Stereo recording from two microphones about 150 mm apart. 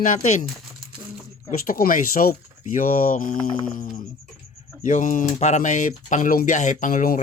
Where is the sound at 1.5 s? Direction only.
70° left (ahead or behind).